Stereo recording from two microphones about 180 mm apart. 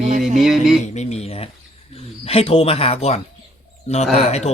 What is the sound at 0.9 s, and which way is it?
Speech, 35° left (ahead or behind).